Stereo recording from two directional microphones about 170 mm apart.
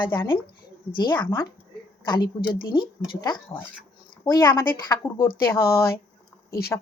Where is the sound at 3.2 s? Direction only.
30° left (ahead or behind).